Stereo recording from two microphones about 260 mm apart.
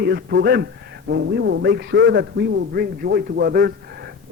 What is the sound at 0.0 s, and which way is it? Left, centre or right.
A man's voice, right.